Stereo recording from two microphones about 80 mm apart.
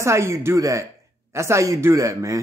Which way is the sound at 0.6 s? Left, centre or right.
Right.